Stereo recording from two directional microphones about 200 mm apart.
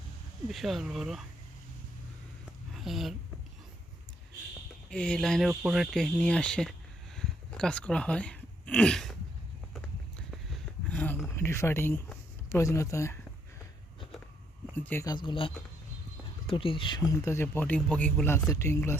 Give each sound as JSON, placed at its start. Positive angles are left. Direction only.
{"t": 0.4, "sound": "speech", "side_deg": 0}
{"t": 2.7, "sound": "speech", "side_deg": 0}
{"t": 4.9, "sound": "speech", "side_deg": 5}
{"t": 7.2, "sound": "a sound", "side_deg": 5}
{"t": 10.8, "sound": "a sound", "side_deg": 5}
{"t": 14.7, "sound": "a man's voice", "side_deg": 10}